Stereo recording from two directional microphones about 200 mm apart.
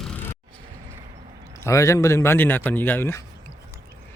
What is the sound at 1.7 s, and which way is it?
Speech, 15° left (ahead or behind).